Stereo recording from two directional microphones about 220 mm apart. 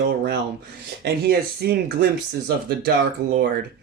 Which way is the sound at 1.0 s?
45° right (ahead or behind).